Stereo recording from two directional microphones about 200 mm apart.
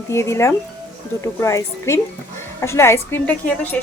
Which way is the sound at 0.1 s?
15° left (ahead or behind).